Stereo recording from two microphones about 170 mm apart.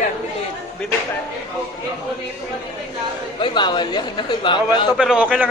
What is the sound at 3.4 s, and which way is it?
Speech, 25° left (ahead or behind).